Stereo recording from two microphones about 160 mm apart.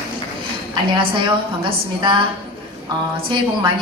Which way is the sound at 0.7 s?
30° right (ahead or behind).